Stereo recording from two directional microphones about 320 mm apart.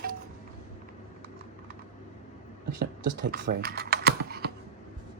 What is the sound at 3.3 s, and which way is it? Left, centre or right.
Typing, right.